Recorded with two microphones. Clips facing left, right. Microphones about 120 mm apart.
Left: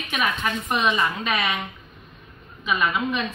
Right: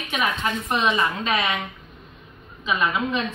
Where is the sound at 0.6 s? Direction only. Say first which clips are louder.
Even; centre (ahead or behind).